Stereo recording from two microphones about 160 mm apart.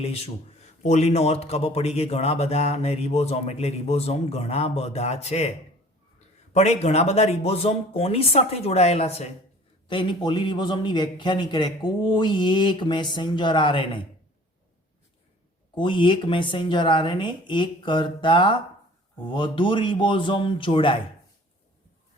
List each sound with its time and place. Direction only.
0.0 s a man's voice: 40° left (ahead or behind)
15.7 s speech: 30° left (ahead or behind)